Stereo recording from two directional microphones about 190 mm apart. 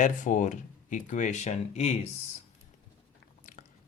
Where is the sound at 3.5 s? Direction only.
45° left (ahead or behind).